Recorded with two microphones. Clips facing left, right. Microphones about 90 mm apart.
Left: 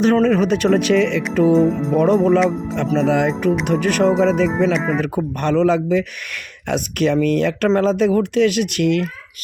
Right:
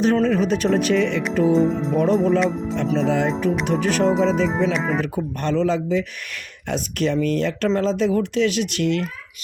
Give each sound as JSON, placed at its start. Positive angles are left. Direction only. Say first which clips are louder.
{"t": 0.0, "sound": "speech", "louder": "left 3 dB", "side_deg": 65}
{"t": 2.0, "sound": "speech", "louder": "left 4 dB", "side_deg": 65}